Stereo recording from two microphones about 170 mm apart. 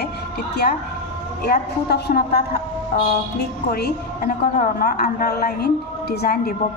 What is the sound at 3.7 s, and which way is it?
A woman's voice, 65° left (ahead or behind).